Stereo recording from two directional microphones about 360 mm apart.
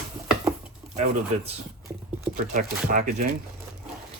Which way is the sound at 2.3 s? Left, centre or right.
Right.